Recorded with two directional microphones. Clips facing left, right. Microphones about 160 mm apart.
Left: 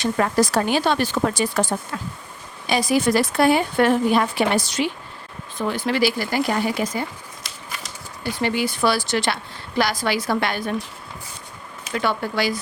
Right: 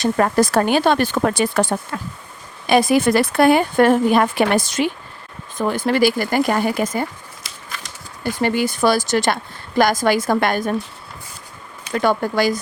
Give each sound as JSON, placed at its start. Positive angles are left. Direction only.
{"t": 0.0, "sound": "speech", "side_deg": -50}
{"t": 8.2, "sound": "speech", "side_deg": -45}
{"t": 11.9, "sound": "speech", "side_deg": -45}